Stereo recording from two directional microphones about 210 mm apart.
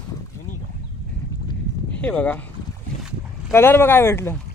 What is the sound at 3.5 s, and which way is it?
Speech, 10° left (ahead or behind).